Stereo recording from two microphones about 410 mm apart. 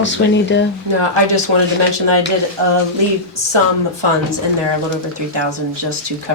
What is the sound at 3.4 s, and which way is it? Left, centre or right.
Speech, right.